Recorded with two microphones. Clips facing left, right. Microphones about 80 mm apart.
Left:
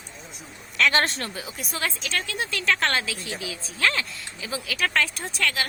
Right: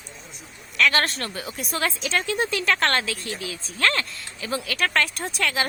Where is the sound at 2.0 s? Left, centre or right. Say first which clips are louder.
Right 5 dB; right.